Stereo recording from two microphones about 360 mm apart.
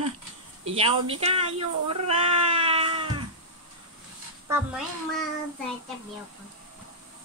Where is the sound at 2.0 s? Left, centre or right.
Centre.